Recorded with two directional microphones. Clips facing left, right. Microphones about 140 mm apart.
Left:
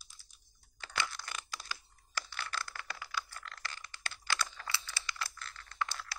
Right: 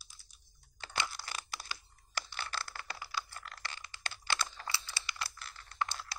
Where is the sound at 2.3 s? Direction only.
30° right (ahead or behind).